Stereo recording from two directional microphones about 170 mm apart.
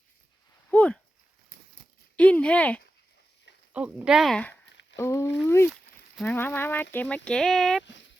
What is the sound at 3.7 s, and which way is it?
Speech, 5° right (ahead or behind).